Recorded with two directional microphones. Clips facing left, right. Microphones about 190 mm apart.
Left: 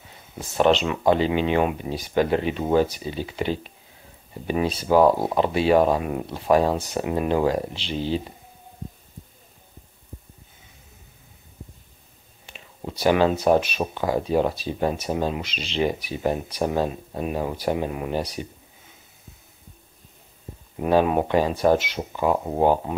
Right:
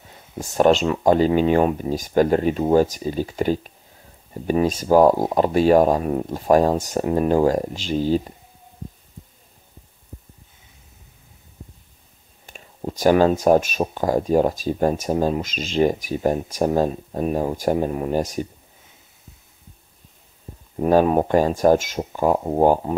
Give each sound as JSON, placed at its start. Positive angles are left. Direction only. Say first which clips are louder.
{"t": 0.4, "sound": "speech", "louder": "right 3 dB", "side_deg": -45}
{"t": 12.4, "sound": "speech", "louder": "right 5 dB", "side_deg": -45}
{"t": 20.9, "sound": "speech", "louder": "right 3 dB", "side_deg": -40}